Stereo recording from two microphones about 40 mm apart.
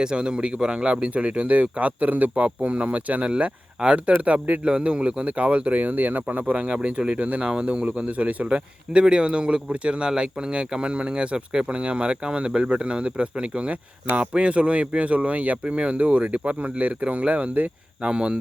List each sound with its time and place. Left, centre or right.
0.0 s speech: right
6.7 s speech: right
8.4 s speech: right
18.0 s speech: right